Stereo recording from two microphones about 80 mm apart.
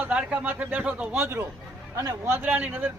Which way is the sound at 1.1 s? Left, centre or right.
Right.